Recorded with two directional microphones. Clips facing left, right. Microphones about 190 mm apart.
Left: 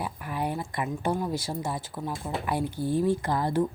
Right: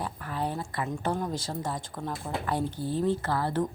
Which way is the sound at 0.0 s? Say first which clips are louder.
Left 1 dB; 15° left (ahead or behind).